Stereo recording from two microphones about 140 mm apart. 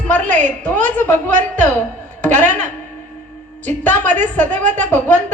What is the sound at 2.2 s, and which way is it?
Speech, 15° left (ahead or behind).